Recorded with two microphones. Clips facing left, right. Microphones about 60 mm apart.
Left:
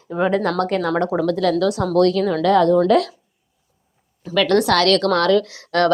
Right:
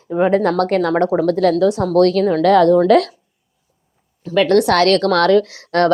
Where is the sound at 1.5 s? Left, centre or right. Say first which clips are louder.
Right 4 dB; right.